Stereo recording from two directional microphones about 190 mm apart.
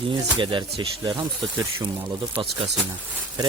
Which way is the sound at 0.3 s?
25° right (ahead or behind).